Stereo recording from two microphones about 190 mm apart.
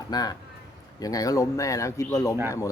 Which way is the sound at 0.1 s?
20° left (ahead or behind).